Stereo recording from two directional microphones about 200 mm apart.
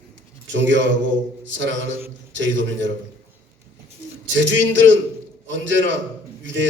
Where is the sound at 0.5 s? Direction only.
65° right (ahead or behind).